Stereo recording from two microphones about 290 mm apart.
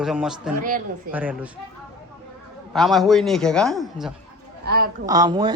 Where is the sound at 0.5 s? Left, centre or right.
Right.